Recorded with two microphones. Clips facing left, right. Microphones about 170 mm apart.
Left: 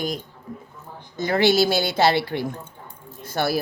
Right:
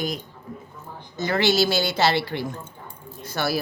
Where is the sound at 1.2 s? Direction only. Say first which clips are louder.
Left 2 dB; 55° left (ahead or behind).